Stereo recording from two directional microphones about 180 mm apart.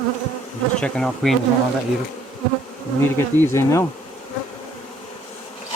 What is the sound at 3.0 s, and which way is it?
Speech, 15° left (ahead or behind).